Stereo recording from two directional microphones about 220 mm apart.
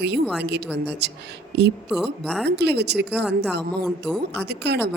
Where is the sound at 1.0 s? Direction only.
50° right (ahead or behind).